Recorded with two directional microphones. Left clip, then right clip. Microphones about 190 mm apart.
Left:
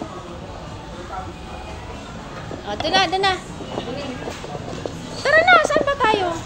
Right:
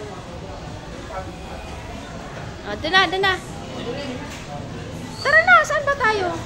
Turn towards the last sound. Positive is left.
turn(degrees=0)  # may be behind; listen again after turning